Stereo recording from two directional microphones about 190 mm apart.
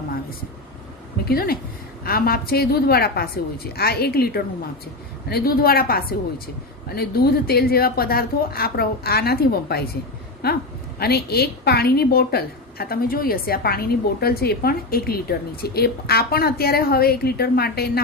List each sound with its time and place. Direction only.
1.2 s a woman's voice: 55° left (ahead or behind)